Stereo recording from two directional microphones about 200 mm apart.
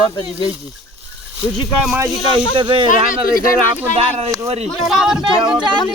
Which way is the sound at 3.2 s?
45° left (ahead or behind).